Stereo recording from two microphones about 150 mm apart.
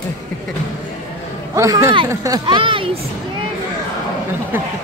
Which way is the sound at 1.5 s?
20° right (ahead or behind).